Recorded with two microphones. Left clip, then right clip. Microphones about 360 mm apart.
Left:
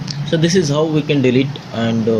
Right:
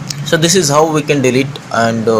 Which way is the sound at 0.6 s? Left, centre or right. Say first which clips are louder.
Right 6 dB; right.